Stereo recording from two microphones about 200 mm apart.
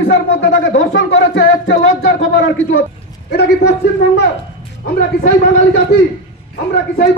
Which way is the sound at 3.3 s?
55° left (ahead or behind).